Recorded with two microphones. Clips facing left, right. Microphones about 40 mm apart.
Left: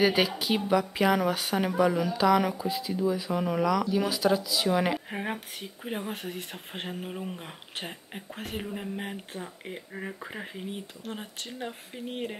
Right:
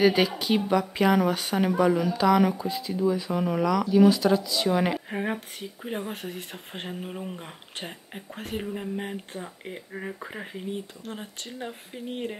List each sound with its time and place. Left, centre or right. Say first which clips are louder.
0.0 s speech: right 3 dB; centre